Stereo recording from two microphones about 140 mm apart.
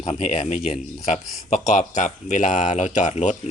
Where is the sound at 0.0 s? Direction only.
45° left (ahead or behind).